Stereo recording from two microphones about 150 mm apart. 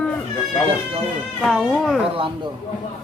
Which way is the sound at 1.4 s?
Centre (ahead or behind).